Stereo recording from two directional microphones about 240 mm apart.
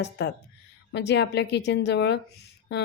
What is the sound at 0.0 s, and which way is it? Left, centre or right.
A woman's voice, left.